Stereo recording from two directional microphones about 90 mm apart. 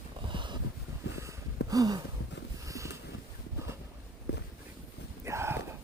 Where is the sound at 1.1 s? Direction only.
40° right (ahead or behind).